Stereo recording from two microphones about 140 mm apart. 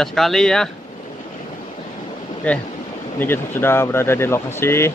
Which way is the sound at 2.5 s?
10° left (ahead or behind).